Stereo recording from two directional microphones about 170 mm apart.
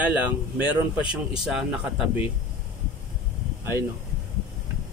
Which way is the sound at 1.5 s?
5° right (ahead or behind).